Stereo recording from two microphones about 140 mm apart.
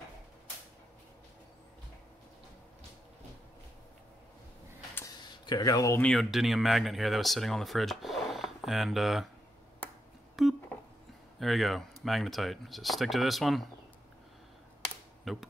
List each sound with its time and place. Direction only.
4.9 s tick: 25° left (ahead or behind)
5.9 s speech: 5° left (ahead or behind)
10.4 s a sound: centre (ahead or behind)
11.3 s speech: centre (ahead or behind)
15.3 s speech: centre (ahead or behind)